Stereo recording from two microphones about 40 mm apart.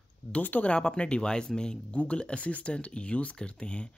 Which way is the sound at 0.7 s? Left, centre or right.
Left.